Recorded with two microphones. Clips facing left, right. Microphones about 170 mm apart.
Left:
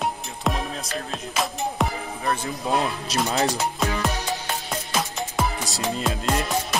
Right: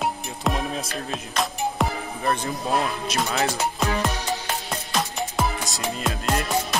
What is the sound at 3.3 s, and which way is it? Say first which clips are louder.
Speech: left 2 dB; 35° left (ahead or behind).